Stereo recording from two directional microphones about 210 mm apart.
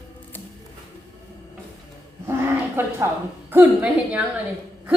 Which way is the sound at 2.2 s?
10° right (ahead or behind).